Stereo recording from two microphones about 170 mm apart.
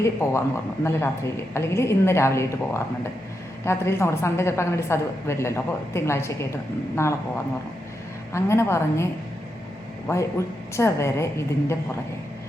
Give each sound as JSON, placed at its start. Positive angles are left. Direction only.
{"t": 0.0, "sound": "a woman's voice", "side_deg": 15}
{"t": 10.8, "sound": "a woman's voice", "side_deg": 15}